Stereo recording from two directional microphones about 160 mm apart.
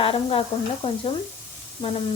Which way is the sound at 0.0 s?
35° left (ahead or behind).